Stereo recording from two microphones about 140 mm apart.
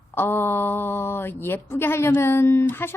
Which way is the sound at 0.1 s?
15° left (ahead or behind).